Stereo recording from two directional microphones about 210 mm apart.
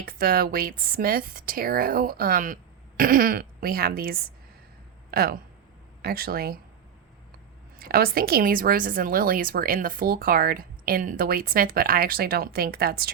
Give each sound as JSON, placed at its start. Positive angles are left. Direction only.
{"t": 0.0, "sound": "a woman's voice", "side_deg": -45}
{"t": 7.8, "sound": "a woman's voice", "side_deg": -45}